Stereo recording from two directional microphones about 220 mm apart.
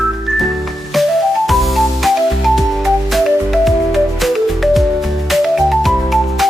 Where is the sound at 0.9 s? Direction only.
Centre (ahead or behind).